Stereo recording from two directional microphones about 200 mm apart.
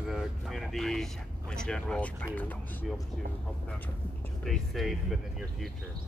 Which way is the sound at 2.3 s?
10° left (ahead or behind).